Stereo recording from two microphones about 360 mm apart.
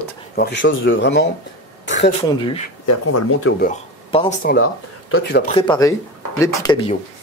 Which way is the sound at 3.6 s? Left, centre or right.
Centre.